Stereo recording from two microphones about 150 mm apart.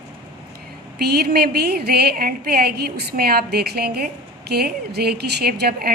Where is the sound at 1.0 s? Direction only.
90° right.